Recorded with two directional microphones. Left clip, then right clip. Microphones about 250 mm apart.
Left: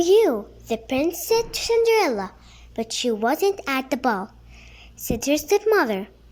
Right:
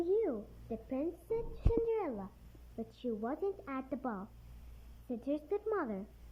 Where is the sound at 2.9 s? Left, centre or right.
Centre; by 4.2 s left.